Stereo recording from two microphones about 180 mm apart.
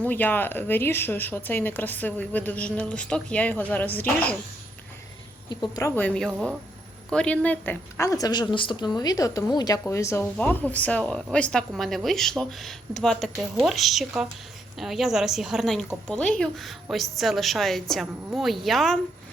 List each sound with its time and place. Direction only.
0.0 s speech: 10° left (ahead or behind)
5.5 s a woman's voice: 20° left (ahead or behind)
6.0 s a woman's voice: 5° left (ahead or behind)